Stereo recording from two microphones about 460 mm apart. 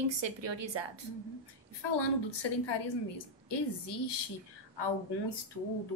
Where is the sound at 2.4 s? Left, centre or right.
Left.